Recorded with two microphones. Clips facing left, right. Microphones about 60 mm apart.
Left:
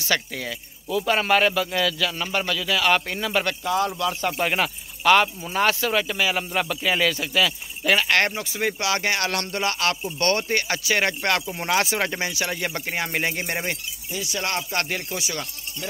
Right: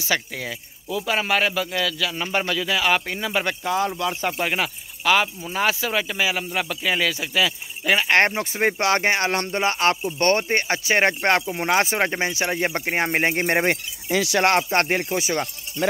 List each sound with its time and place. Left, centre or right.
0.1 s speech: centre
2.1 s a man's voice: centre
3.6 s speech: right
4.3 s speech: centre
8.1 s speech: right
8.4 s speech: right
9.1 s speech: right
14.0 s speech: right
14.4 s speech: right